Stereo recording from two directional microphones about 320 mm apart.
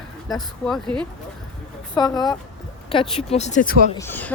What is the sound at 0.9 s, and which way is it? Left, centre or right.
Speech, centre.